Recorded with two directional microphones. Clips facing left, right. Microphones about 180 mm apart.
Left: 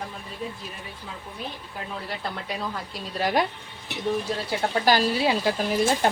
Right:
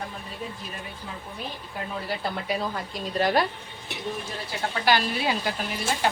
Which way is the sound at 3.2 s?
10° left (ahead or behind).